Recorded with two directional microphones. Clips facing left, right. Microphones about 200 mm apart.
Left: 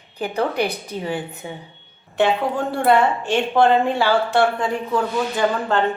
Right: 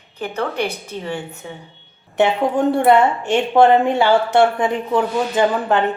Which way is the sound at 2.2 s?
20° right (ahead or behind).